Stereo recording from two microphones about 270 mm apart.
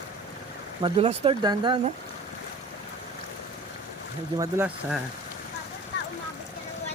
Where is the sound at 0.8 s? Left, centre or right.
Centre.